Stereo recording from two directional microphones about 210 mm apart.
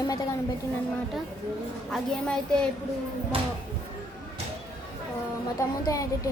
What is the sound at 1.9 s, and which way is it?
Speech, 5° left (ahead or behind).